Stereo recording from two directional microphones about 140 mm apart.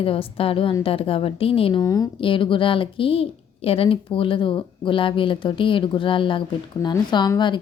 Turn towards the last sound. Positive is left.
turn(degrees=30)  # may be behind; listen again after turning